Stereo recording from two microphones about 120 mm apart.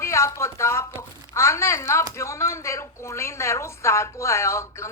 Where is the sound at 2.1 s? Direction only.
25° left (ahead or behind).